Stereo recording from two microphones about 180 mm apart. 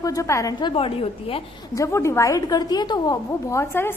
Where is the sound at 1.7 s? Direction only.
15° left (ahead or behind).